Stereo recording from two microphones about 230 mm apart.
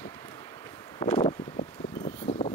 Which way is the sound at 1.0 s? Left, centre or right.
Centre.